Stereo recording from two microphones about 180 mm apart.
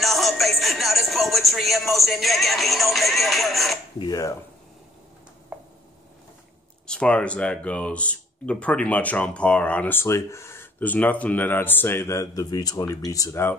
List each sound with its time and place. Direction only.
0.0 s music: centre (ahead or behind)
4.0 s speech: 20° left (ahead or behind)
5.5 s a sound: 10° right (ahead or behind)
6.9 s speech: 5° left (ahead or behind)